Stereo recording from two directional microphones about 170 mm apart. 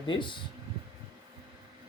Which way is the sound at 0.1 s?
30° left (ahead or behind).